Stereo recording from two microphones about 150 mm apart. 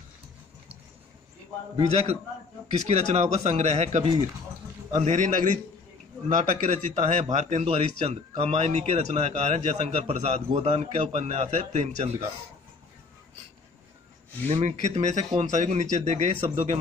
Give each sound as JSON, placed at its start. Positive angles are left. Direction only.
{"t": 1.9, "sound": "a man's voice", "side_deg": -45}
{"t": 14.5, "sound": "speech", "side_deg": -50}